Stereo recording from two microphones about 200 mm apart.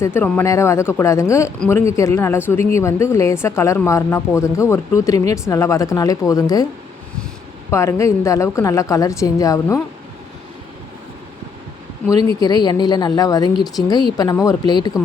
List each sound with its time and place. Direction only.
0.0 s speech: 10° left (ahead or behind)
7.7 s speech: 15° left (ahead or behind)
12.4 s a woman's voice: 20° left (ahead or behind)